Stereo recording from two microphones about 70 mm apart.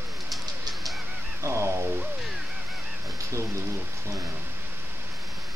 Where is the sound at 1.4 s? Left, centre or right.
Right.